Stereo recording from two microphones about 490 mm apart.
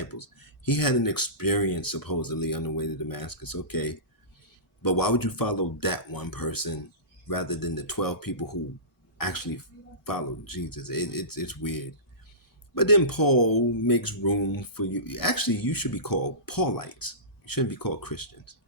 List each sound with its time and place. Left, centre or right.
0.0 s speech: left